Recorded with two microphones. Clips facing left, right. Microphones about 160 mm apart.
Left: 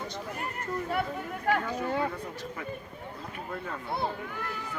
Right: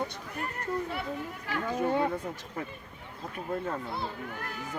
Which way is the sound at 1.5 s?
50° left (ahead or behind).